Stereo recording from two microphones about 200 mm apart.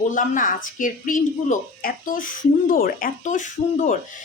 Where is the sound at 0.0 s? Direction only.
40° left (ahead or behind).